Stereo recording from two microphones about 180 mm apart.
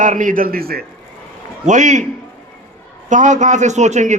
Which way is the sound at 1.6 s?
45° right (ahead or behind).